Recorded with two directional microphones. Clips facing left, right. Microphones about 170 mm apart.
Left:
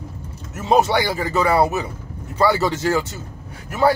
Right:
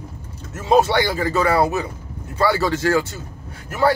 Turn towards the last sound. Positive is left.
turn(degrees=15)  # may be behind; listen again after turning